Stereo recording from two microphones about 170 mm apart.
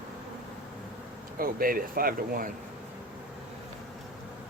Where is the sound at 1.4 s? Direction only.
60° right (ahead or behind).